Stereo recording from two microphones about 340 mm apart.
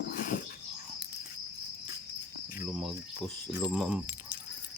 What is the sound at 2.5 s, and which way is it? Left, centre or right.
Cricket, centre.